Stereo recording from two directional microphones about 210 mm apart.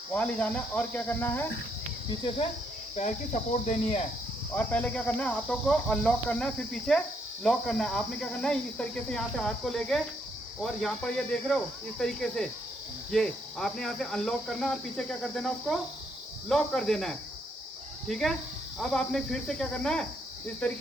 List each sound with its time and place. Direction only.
0.1 s cricket: 5° left (ahead or behind)
2.9 s speech: 35° left (ahead or behind)
4.5 s speech: 5° left (ahead or behind)